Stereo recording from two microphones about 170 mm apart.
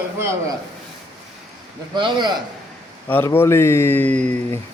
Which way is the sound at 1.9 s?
25° right (ahead or behind).